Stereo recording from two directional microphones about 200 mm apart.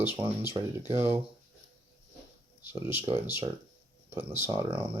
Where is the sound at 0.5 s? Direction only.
15° right (ahead or behind).